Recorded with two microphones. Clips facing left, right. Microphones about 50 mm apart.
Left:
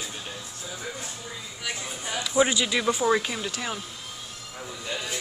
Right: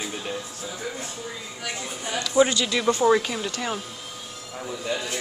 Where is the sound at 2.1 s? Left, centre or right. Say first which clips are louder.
Right 3 dB; centre.